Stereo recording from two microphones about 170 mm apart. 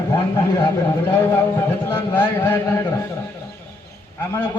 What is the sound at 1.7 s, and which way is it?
Speech, 15° left (ahead or behind).